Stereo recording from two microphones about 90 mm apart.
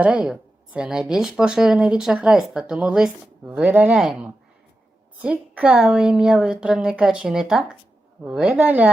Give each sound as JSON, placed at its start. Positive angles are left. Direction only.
{"t": 0.0, "sound": "speech", "side_deg": -15}